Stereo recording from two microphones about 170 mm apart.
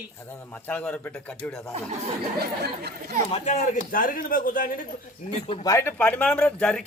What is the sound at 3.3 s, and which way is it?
A man's voice, 45° left (ahead or behind).